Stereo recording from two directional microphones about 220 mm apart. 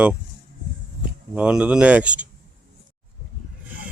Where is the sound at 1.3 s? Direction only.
5° right (ahead or behind).